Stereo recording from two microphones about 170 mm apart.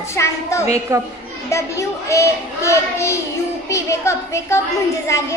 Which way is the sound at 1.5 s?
15° left (ahead or behind).